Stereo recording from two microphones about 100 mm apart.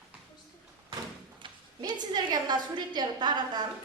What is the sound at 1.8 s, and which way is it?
A woman's voice, 45° right (ahead or behind).